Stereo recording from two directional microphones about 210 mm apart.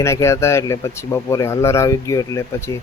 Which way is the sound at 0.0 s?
15° left (ahead or behind).